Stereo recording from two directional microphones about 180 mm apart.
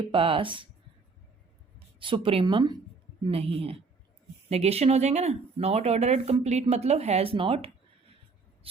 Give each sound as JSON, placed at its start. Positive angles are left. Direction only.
{"t": 0.0, "sound": "speech", "side_deg": -30}
{"t": 2.0, "sound": "speech", "side_deg": -30}